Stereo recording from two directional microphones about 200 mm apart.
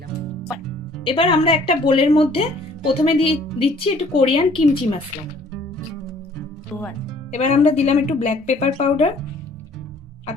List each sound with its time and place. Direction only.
1.0 s a woman's voice: 25° left (ahead or behind)
7.3 s speech: 35° left (ahead or behind)